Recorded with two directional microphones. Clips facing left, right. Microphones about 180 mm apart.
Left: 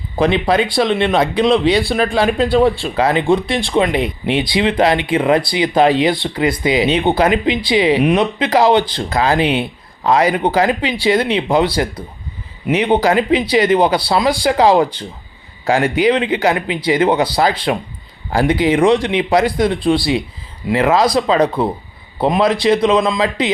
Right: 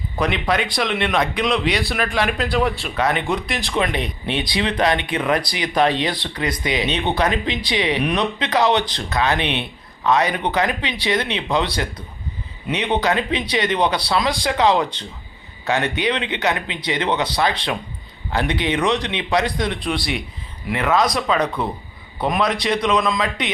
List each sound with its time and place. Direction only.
0.2 s a man's voice: 30° left (ahead or behind)
16.0 s a man's voice: 30° left (ahead or behind)